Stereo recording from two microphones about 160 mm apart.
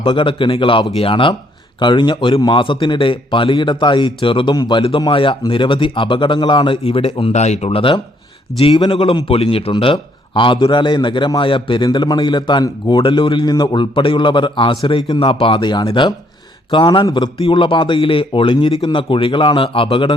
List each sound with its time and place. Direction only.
0.0 s a man's voice: 30° left (ahead or behind)